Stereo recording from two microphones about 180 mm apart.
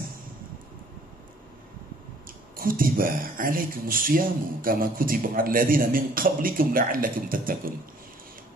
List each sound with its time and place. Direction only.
2.5 s speech: 55° right (ahead or behind)